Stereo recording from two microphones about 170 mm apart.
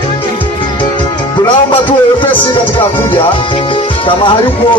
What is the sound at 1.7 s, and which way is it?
Speech, 30° left (ahead or behind).